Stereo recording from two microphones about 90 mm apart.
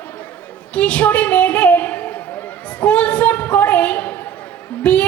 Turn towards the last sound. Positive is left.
turn(degrees=15)  # may be behind; listen again after turning